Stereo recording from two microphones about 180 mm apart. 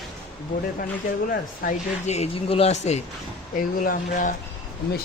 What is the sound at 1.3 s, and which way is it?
Speech, 50° left (ahead or behind).